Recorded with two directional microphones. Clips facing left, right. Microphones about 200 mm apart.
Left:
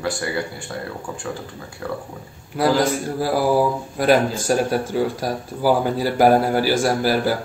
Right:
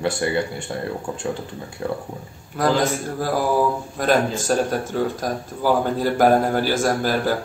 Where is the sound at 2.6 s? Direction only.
10° left (ahead or behind).